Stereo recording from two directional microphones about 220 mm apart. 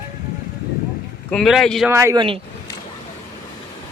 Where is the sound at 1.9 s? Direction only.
15° right (ahead or behind).